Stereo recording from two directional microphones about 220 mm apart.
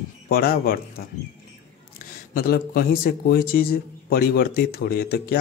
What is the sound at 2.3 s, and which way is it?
A man's voice, 45° left (ahead or behind).